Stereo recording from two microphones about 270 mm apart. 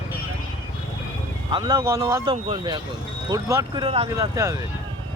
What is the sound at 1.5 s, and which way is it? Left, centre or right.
Speech, centre.